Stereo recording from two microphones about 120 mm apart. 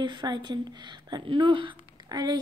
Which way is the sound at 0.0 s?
40° right (ahead or behind).